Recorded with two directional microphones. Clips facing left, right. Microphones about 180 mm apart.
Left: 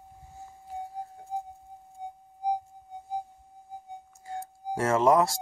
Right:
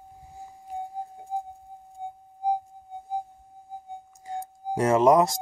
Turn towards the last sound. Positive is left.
turn(degrees=-20)  # may be behind; listen again after turning